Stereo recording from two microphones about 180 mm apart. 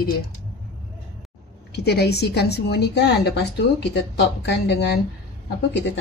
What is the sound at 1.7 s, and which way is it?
A woman's voice, 65° left (ahead or behind).